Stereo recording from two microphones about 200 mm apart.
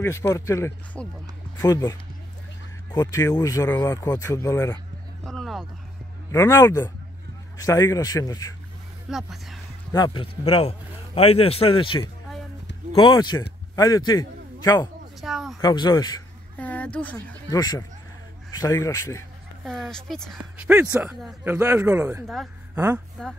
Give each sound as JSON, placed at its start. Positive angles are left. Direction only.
{"t": 0.0, "sound": "speech", "side_deg": 15}
{"t": 5.2, "sound": "a sound", "side_deg": 0}
{"t": 6.3, "sound": "speech", "side_deg": 15}
{"t": 9.1, "sound": "speech", "side_deg": 0}
{"t": 9.9, "sound": "a man's voice", "side_deg": 20}
{"t": 15.1, "sound": "a sound", "side_deg": 0}
{"t": 15.6, "sound": "a man's voice", "side_deg": 20}
{"t": 16.5, "sound": "speech", "side_deg": 10}
{"t": 17.5, "sound": "a man's voice", "side_deg": 20}
{"t": 19.6, "sound": "speech", "side_deg": 0}
{"t": 22.2, "sound": "speech", "side_deg": 0}